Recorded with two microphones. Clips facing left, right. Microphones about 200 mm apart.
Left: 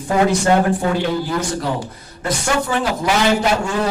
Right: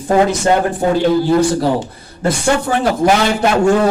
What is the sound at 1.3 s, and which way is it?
Speech, 30° right (ahead or behind).